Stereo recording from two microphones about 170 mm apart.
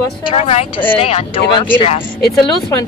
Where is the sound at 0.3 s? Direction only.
40° left (ahead or behind).